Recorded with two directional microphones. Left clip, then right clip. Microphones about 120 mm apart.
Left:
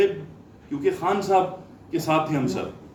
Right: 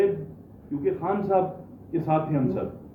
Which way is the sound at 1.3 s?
30° left (ahead or behind).